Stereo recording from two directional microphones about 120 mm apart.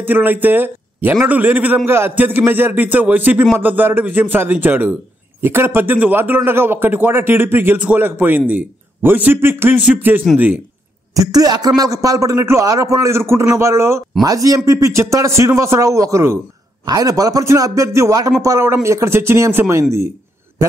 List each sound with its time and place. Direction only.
0.0 s a man's voice: 15° right (ahead or behind)
11.3 s a man's voice: 30° right (ahead or behind)